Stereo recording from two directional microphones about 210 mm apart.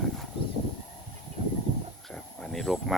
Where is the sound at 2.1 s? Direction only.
Centre (ahead or behind).